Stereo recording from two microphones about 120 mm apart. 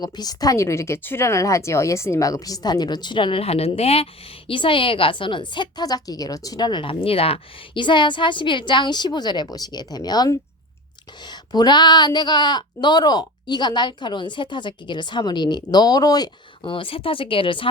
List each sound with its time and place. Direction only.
0.0 s speech: 35° left (ahead or behind)